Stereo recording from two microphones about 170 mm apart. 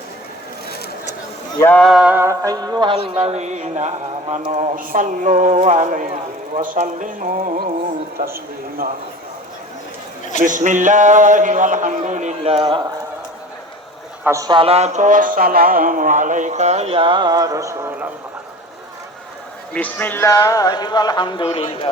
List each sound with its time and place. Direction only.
1.5 s a sound: 15° left (ahead or behind)
1.8 s music: centre (ahead or behind); by 3.0 s 25° right (ahead or behind)
3.2 s a man's voice: 40° right (ahead or behind); by 8.3 s 55° right (ahead or behind)
10.4 s a man's voice: 50° right (ahead or behind); by 12.8 s 30° right (ahead or behind)
14.3 s speech: 20° right (ahead or behind)
19.7 s speech: 10° left (ahead or behind); by 21.8 s 30° left (ahead or behind)